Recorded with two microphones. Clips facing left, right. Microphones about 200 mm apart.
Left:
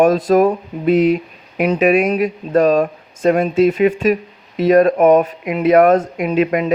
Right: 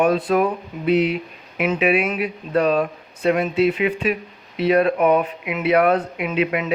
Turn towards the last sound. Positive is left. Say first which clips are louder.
# left 6 dB
turn(degrees=40)  # may be behind; listen again after turning